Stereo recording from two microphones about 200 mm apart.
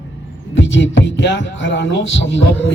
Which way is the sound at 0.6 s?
65° left (ahead or behind).